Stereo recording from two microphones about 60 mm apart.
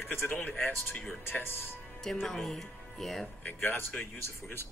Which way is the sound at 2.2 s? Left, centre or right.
Centre.